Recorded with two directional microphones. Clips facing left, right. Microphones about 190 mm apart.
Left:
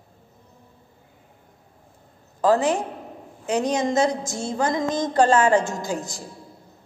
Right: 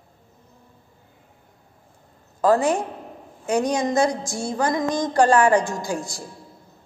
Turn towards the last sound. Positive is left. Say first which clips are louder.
# even
turn(degrees=20)  # may be behind; listen again after turning